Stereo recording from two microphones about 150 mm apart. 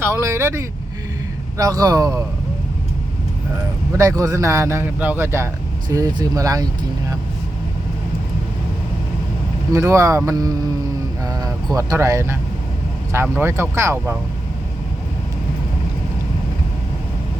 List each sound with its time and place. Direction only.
0.0 s a man's voice: 15° right (ahead or behind)
3.9 s a man's voice: 20° right (ahead or behind)
9.7 s a man's voice: 20° right (ahead or behind)